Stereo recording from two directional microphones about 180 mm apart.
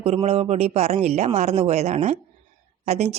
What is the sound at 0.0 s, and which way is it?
Speech, 35° right (ahead or behind).